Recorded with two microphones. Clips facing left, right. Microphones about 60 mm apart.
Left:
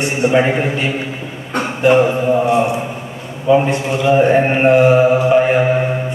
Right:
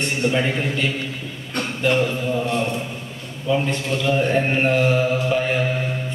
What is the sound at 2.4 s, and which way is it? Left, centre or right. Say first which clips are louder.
Speech: left 8 dB; centre.